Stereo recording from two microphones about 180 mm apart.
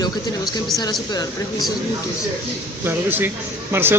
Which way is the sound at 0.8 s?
20° left (ahead or behind).